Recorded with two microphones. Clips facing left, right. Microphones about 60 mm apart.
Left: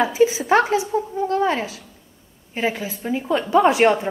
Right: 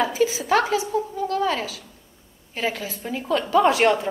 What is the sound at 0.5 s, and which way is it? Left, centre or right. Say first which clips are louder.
A woman's voice: left 3 dB; left.